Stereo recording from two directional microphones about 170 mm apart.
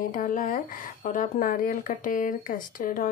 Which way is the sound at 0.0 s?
50° left (ahead or behind).